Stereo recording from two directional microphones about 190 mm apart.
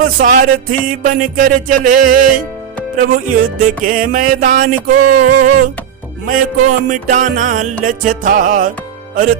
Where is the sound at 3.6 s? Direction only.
45° right (ahead or behind).